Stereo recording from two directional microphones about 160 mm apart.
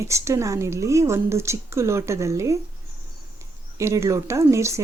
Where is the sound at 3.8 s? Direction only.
20° right (ahead or behind).